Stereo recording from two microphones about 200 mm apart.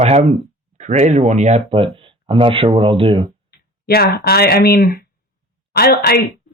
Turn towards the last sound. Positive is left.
turn(degrees=50)  # may be behind; listen again after turning